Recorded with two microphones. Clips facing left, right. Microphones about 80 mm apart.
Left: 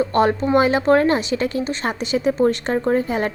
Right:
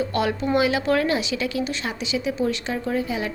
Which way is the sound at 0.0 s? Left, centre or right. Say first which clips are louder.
Left 6 dB; left.